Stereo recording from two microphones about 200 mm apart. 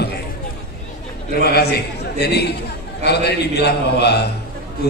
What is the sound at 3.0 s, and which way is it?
A man's voice, 55° left (ahead or behind).